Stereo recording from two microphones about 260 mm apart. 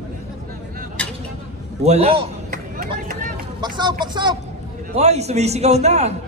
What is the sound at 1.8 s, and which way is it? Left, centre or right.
Speech, right.